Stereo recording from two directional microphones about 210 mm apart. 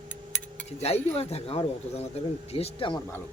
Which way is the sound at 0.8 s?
30° left (ahead or behind).